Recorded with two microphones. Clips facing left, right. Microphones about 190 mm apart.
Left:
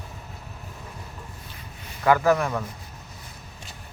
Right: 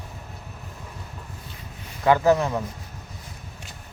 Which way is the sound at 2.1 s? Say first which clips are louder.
Right 1 dB; 20° right (ahead or behind).